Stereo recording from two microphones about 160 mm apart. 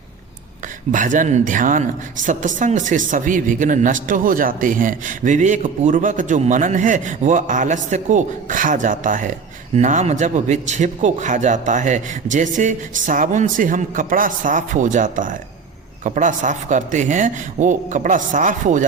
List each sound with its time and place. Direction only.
0.9 s a woman's voice: 55° right (ahead or behind)